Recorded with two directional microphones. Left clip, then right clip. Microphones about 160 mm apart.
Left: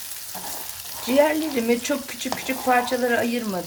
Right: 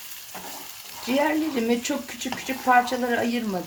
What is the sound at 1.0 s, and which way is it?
Speech, 20° left (ahead or behind).